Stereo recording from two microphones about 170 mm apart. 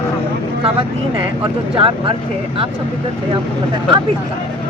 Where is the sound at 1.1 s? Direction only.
30° right (ahead or behind).